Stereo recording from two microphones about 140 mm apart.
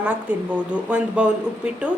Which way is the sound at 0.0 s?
10° right (ahead or behind).